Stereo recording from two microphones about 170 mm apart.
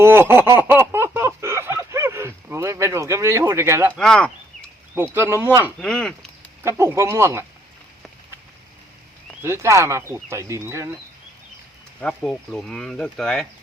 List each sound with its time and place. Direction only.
0.0 s a sound: 15° right (ahead or behind)
3.9 s speech: 5° left (ahead or behind)
5.1 s speech: 15° right (ahead or behind)
5.8 s speech: 5° left (ahead or behind)
6.6 s speech: 15° right (ahead or behind)
9.4 s speech: 15° right (ahead or behind)
11.9 s speech: 5° left (ahead or behind)